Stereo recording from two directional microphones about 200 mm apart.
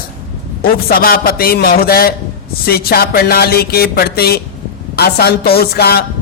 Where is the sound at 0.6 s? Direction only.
45° left (ahead or behind).